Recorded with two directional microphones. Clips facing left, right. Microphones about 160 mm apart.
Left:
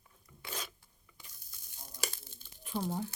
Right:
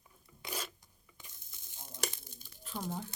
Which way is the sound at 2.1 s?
15° right (ahead or behind).